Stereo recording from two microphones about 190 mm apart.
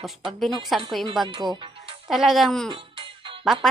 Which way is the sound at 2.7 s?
25° right (ahead or behind).